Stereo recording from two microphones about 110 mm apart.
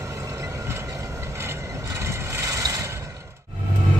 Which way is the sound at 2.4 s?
30° right (ahead or behind).